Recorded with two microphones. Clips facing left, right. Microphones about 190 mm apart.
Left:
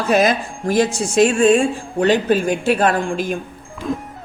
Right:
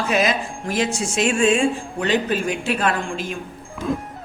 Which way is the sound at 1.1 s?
40° left (ahead or behind).